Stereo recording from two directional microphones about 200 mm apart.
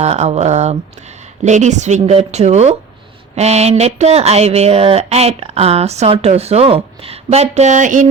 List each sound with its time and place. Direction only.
0.0 s speech: 35° right (ahead or behind)